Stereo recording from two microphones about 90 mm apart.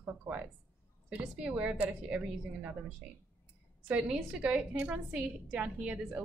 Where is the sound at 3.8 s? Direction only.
15° right (ahead or behind).